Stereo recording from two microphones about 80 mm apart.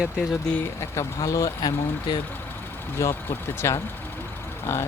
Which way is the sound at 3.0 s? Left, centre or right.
Left.